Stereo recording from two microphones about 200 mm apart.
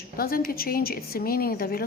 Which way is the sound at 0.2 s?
50° left (ahead or behind).